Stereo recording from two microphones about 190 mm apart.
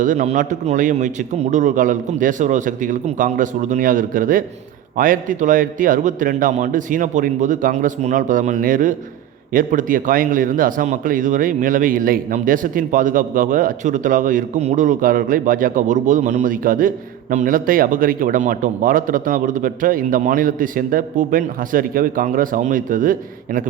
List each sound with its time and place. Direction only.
0.0 s speech: 40° right (ahead or behind)